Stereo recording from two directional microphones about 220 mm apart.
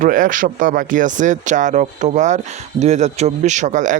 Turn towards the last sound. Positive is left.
turn(degrees=-35)  # may be behind; listen again after turning